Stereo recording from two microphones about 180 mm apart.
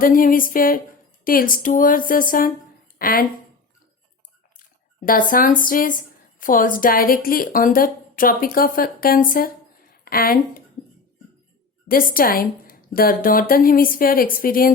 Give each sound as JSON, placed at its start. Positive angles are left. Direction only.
{"t": 0.0, "sound": "a woman's voice", "side_deg": 50}
{"t": 4.9, "sound": "a woman's voice", "side_deg": 50}
{"t": 11.9, "sound": "a woman's voice", "side_deg": 55}